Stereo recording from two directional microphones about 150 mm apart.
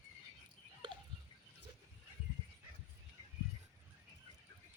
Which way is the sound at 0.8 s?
35° right (ahead or behind).